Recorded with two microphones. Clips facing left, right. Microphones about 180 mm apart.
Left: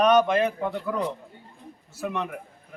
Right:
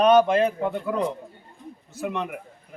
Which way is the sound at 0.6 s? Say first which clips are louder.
Right 2 dB; 15° right (ahead or behind).